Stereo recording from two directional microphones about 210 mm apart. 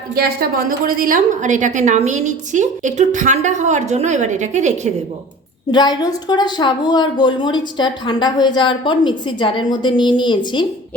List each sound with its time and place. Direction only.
0.1 s a woman's voice: 45° right (ahead or behind)
5.7 s speech: 20° left (ahead or behind)